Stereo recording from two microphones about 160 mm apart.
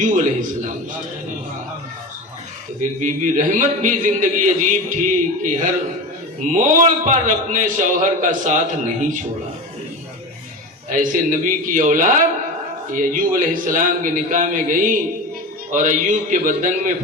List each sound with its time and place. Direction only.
3.0 s a man's voice: 50° right (ahead or behind)
10.8 s a man's voice: 55° right (ahead or behind)